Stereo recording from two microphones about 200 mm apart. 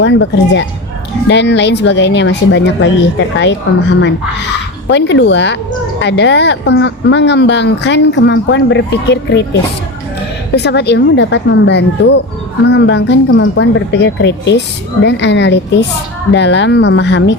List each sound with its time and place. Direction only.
0.0 s speech: 65° left (ahead or behind)
4.9 s speech: 65° left (ahead or behind)